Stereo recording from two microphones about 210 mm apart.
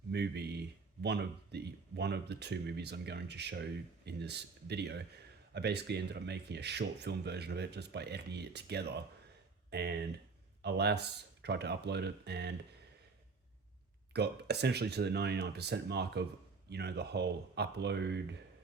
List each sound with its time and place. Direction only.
0.1 s speech: 50° right (ahead or behind)
14.1 s speech: 50° right (ahead or behind)